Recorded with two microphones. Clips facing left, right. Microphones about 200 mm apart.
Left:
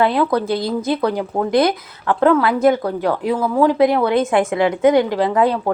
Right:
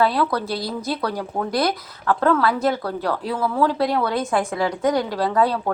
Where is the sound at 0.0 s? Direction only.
20° left (ahead or behind).